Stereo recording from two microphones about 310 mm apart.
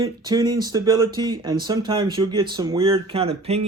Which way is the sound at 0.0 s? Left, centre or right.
Centre.